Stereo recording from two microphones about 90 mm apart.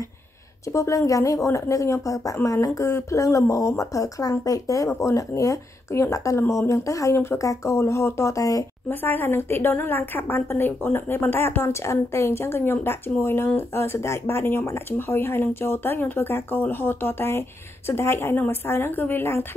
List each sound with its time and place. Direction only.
0.7 s speech: 35° left (ahead or behind)
8.8 s a woman's voice: 25° left (ahead or behind)